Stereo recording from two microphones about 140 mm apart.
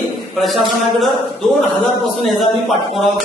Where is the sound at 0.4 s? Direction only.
Centre (ahead or behind).